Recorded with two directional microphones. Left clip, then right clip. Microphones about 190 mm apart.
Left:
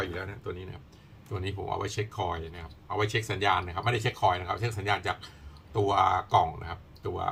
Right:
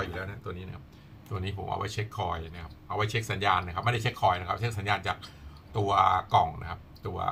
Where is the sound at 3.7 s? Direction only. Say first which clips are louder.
Even; 20° left (ahead or behind).